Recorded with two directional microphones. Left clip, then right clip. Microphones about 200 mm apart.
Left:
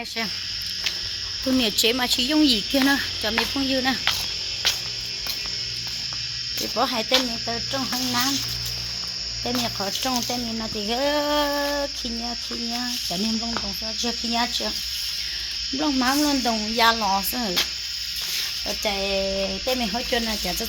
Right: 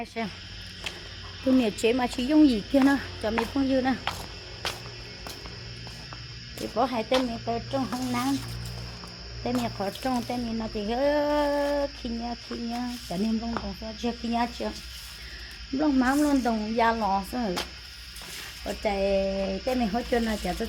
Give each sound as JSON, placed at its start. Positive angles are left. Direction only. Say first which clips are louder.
{"t": 1.5, "sound": "speech", "louder": "left 2 dB", "side_deg": 5}
{"t": 6.7, "sound": "speech", "louder": "left 3 dB", "side_deg": 20}
{"t": 9.8, "sound": "speech", "louder": "left 4 dB", "side_deg": 20}
{"t": 14.0, "sound": "speech", "louder": "left 3 dB", "side_deg": 15}
{"t": 15.8, "sound": "speech", "louder": "left 1 dB", "side_deg": 5}
{"t": 18.9, "sound": "speech", "louder": "even", "side_deg": 5}